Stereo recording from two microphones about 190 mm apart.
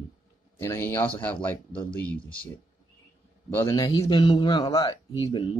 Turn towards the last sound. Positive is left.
turn(degrees=25)  # may be behind; listen again after turning